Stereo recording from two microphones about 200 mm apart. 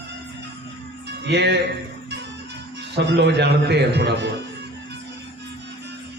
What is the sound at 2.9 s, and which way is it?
A man's voice, 60° right (ahead or behind).